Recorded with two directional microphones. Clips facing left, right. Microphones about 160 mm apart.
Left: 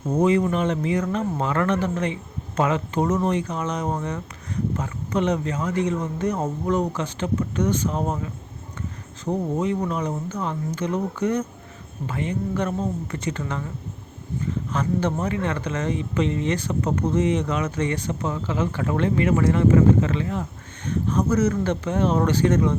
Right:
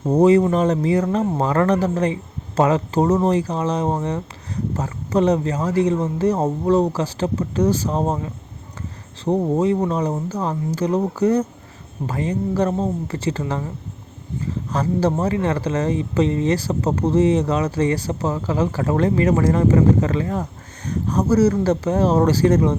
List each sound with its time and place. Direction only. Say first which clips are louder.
0.0 s speech: right 6 dB; 35° right (ahead or behind)